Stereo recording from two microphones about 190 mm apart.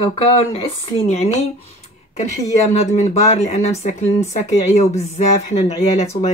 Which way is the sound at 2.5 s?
35° left (ahead or behind).